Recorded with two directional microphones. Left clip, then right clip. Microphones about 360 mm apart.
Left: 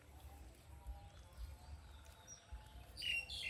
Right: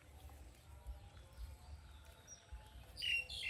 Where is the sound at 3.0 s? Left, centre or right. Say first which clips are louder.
Right 2 dB; left.